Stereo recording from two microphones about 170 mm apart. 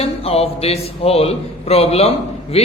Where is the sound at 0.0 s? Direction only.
35° left (ahead or behind).